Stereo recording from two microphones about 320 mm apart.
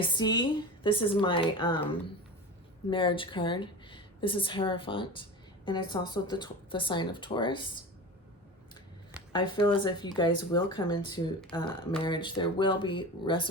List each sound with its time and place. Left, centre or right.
0.0 s a woman's voice: centre
9.3 s speech: centre